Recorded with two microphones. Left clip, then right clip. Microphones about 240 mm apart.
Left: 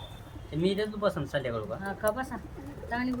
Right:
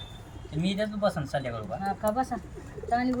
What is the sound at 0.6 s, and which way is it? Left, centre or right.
Speech, centre.